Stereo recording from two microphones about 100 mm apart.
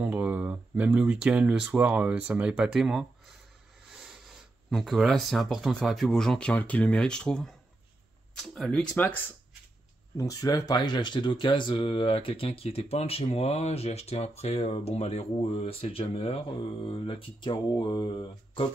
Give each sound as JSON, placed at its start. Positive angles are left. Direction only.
{"t": 0.0, "sound": "speech", "side_deg": -15}
{"t": 8.9, "sound": "speech", "side_deg": 15}
{"t": 10.1, "sound": "speech", "side_deg": 35}